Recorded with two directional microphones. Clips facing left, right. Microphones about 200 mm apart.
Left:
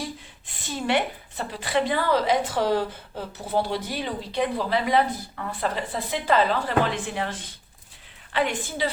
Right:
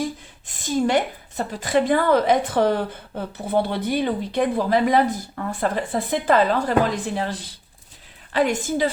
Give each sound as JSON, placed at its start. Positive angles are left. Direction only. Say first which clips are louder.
{"t": 0.4, "sound": "a woman's voice", "louder": "right 7 dB", "side_deg": -45}